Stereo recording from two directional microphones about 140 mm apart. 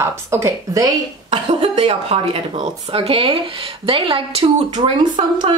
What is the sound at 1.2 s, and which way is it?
Speech, 40° right (ahead or behind).